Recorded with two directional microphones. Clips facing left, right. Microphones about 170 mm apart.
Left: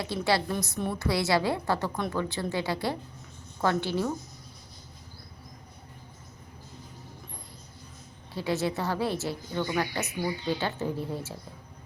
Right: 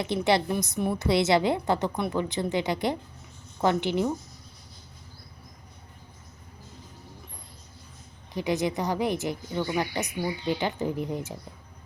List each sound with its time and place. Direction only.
0.0 s a woman's voice: 20° right (ahead or behind)
8.3 s a woman's voice: 15° right (ahead or behind)